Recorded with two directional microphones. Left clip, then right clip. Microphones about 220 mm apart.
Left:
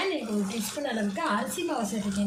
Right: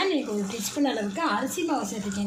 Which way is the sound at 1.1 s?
30° right (ahead or behind).